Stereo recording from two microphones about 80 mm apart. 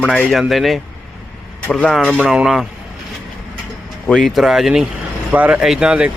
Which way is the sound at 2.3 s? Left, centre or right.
Centre.